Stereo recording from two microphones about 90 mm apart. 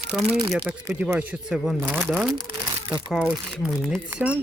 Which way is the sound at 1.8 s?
25° right (ahead or behind).